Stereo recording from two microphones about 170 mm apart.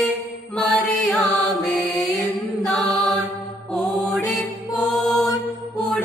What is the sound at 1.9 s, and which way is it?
Music, centre (ahead or behind).